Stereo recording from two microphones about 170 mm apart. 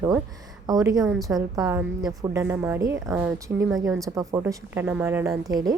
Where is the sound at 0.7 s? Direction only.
20° right (ahead or behind).